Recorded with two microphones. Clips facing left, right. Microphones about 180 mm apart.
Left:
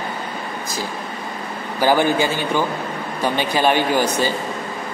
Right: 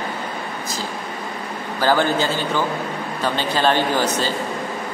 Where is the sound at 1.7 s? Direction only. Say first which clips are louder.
Left 2 dB; 15° left (ahead or behind).